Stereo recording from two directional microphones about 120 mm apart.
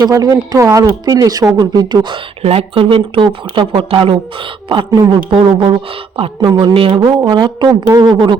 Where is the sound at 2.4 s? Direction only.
55° right (ahead or behind).